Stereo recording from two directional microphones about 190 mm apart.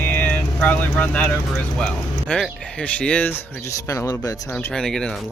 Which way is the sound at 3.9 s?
15° left (ahead or behind).